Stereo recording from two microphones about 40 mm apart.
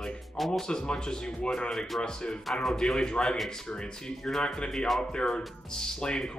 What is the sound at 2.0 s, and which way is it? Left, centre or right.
Speech, left.